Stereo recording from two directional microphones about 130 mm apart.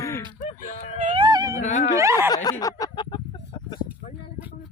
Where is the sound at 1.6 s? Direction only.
70° left (ahead or behind).